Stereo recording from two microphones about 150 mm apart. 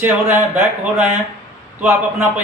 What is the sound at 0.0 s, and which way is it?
A man's voice, 15° right (ahead or behind).